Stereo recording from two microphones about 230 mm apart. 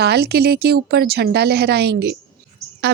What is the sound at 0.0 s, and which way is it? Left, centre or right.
A woman's voice, right.